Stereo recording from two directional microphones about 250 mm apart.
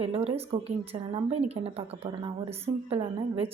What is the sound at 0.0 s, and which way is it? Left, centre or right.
A woman's voice, right.